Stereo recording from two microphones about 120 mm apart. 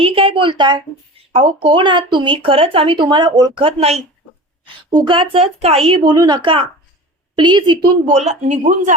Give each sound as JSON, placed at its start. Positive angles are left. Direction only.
{"t": 0.0, "sound": "a woman's voice", "side_deg": -50}
{"t": 3.6, "sound": "speech", "side_deg": -55}
{"t": 4.6, "sound": "a woman's voice", "side_deg": -40}
{"t": 8.1, "sound": "speech", "side_deg": -70}